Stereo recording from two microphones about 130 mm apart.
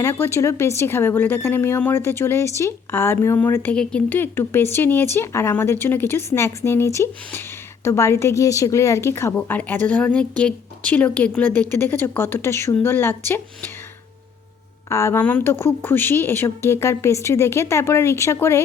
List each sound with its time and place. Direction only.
0.0 s speech: 20° left (ahead or behind)
14.8 s speech: 20° left (ahead or behind)